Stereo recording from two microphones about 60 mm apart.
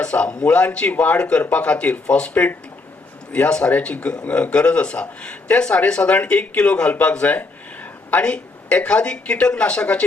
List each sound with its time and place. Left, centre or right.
0.0 s speech: centre
6.9 s a sound: centre
8.2 s speech: centre